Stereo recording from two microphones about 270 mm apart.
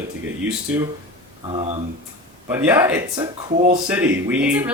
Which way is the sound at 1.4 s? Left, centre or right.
Centre.